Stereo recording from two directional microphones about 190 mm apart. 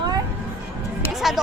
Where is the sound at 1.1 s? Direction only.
Centre (ahead or behind).